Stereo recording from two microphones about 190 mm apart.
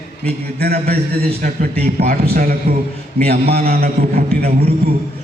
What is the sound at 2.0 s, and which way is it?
Speech, 50° right (ahead or behind).